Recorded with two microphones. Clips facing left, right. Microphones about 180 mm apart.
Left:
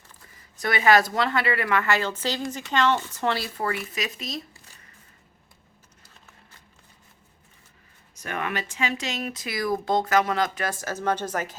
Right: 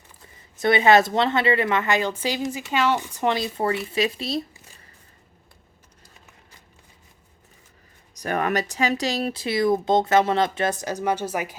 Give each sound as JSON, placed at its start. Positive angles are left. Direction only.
{"t": 0.6, "sound": "a woman's voice", "side_deg": -25}
{"t": 8.1, "sound": "a woman's voice", "side_deg": -40}